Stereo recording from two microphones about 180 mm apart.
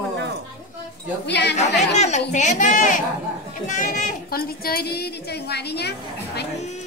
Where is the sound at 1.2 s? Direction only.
70° left (ahead or behind).